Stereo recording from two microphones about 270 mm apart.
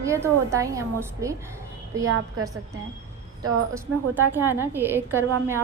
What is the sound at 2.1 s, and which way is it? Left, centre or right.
Speech, right.